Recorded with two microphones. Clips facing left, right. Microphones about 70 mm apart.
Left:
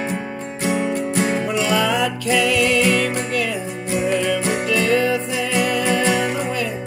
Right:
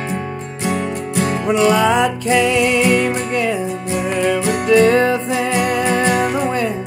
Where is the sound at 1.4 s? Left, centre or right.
Right.